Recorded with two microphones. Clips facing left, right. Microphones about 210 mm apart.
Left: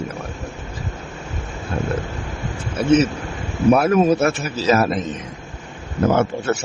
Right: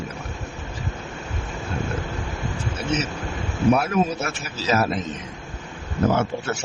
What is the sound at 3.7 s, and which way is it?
Speech, 55° left (ahead or behind).